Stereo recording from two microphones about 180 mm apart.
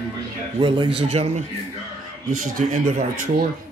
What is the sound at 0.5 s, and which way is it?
A man's voice, 25° right (ahead or behind).